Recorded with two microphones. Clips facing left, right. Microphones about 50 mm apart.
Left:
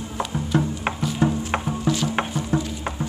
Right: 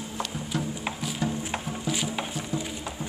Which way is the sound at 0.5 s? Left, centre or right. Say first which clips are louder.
Left 8 dB; left.